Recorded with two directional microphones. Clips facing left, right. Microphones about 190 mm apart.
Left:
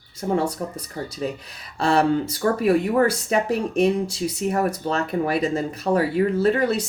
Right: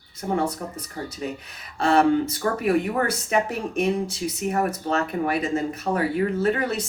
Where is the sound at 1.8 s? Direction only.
35° left (ahead or behind).